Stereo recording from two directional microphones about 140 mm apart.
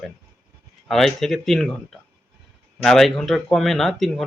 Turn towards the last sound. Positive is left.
turn(degrees=0)  # may be behind; listen again after turning